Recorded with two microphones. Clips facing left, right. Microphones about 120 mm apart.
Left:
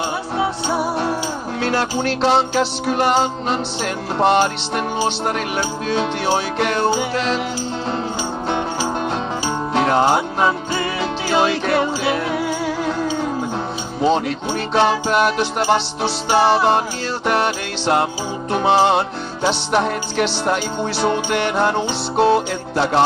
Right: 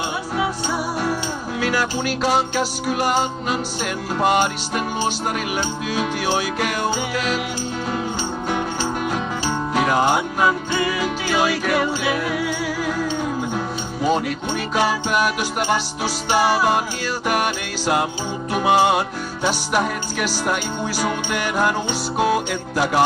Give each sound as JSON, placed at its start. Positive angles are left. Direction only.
{"t": 0.4, "sound": "music", "side_deg": 30}
{"t": 2.0, "sound": "speech", "side_deg": 30}
{"t": 9.8, "sound": "music", "side_deg": 30}
{"t": 14.0, "sound": "speech", "side_deg": 25}
{"t": 17.3, "sound": "music", "side_deg": 30}
{"t": 18.5, "sound": "speech", "side_deg": 30}